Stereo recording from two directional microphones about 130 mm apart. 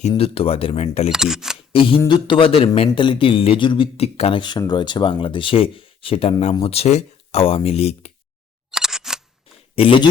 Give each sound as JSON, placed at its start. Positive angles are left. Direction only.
{"t": 0.2, "sound": "a man's voice", "side_deg": 45}
{"t": 1.1, "sound": "speech", "side_deg": -5}
{"t": 1.5, "sound": "a sound", "side_deg": 45}
{"t": 2.0, "sound": "a man's voice", "side_deg": 40}
{"t": 4.4, "sound": "a man's voice", "side_deg": 35}
{"t": 8.7, "sound": "single-lens reflex camera", "side_deg": -5}
{"t": 9.7, "sound": "a man's voice", "side_deg": 45}